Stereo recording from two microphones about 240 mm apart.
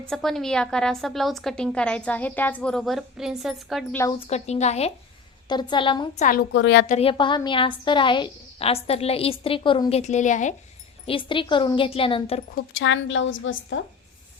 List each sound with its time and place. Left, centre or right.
0.1 s a woman's voice: centre
4.3 s a woman's voice: left
6.5 s a woman's voice: left
6.8 s a woman's voice: left
12.8 s a woman's voice: left